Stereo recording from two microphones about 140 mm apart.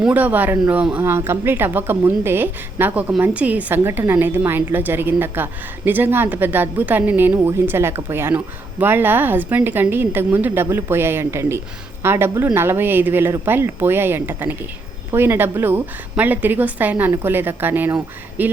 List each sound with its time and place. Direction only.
0.0 s speech: 10° right (ahead or behind)